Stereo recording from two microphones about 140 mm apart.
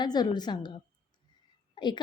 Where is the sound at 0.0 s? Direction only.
30° left (ahead or behind).